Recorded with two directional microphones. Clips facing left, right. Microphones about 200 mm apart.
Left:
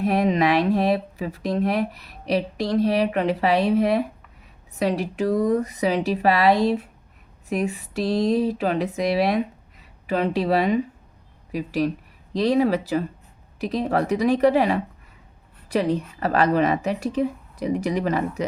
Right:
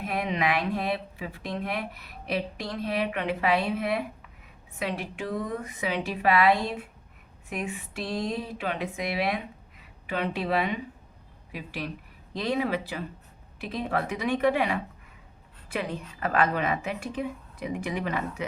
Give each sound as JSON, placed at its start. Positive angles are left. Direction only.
{"t": 0.0, "sound": "speech", "side_deg": 40}